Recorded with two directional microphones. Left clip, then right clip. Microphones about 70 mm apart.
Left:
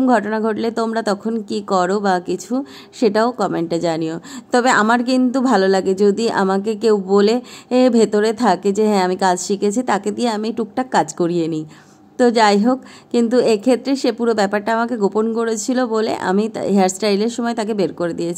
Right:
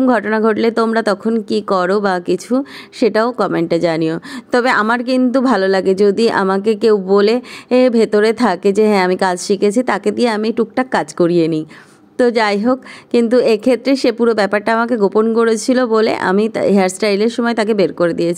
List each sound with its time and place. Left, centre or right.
0.0 s speech: right